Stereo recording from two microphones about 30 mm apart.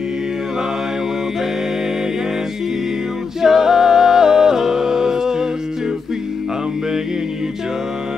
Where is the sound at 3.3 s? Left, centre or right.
Centre.